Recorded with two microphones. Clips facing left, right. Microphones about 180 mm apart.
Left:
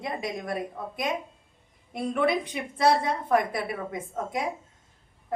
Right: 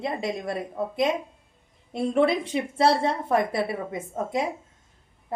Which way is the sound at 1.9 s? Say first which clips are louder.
Right 4 dB; 30° right (ahead or behind).